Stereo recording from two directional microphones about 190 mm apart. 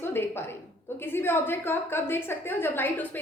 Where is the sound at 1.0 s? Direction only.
10° left (ahead or behind).